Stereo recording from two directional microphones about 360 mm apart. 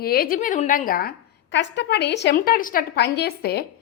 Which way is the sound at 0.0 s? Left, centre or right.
Left.